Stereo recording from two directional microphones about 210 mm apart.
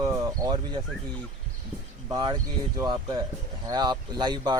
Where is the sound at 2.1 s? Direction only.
20° right (ahead or behind).